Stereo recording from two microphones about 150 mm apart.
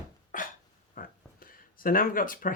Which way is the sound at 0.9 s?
70° left (ahead or behind).